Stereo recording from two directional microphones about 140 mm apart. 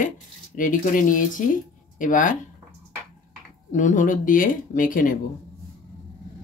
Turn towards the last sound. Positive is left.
turn(degrees=75)  # may be behind; listen again after turning